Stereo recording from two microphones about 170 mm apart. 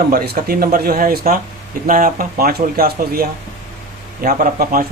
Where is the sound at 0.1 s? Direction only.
65° right (ahead or behind).